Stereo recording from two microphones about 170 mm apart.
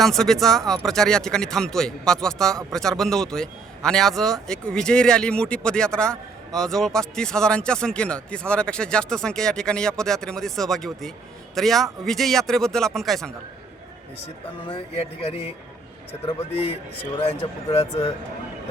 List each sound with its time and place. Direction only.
0.0 s a man's voice: centre (ahead or behind)
15.2 s speech: 35° left (ahead or behind)